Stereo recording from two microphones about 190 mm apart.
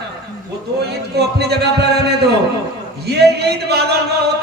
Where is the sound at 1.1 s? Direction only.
60° right (ahead or behind).